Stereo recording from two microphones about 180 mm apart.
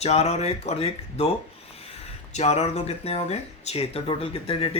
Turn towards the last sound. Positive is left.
turn(degrees=30)  # may be behind; listen again after turning